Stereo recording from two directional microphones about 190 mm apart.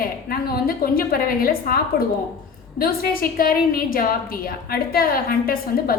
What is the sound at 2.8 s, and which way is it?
A woman's voice, 50° left (ahead or behind).